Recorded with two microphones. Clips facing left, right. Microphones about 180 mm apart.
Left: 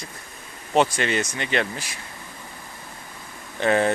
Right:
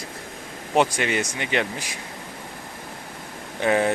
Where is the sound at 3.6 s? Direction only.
10° right (ahead or behind).